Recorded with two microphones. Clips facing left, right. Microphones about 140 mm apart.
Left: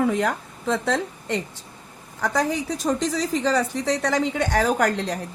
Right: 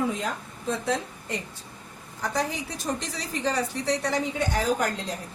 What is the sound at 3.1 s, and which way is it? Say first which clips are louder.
A woman's voice: left 6 dB; 90° left.